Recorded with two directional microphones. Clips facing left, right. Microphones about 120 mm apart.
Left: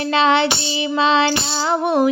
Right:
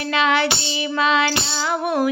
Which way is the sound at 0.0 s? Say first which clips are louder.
Left 3 dB; 30° left (ahead or behind).